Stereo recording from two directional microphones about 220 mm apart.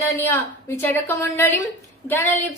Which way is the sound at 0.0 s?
10° left (ahead or behind).